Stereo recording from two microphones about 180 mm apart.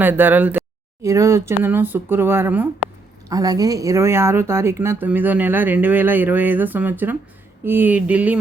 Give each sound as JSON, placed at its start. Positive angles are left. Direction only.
{"t": 0.0, "sound": "speech", "side_deg": -10}